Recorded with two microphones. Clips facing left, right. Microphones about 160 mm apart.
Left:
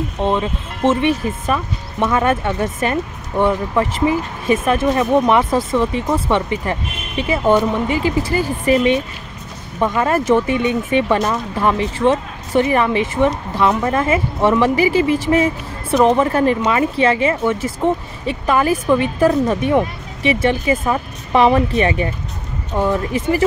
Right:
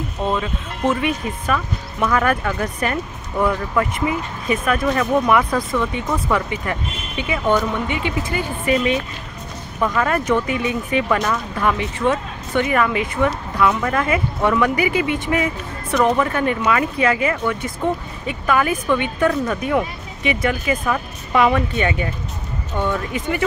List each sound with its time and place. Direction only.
0.2 s speech: 30° left (ahead or behind)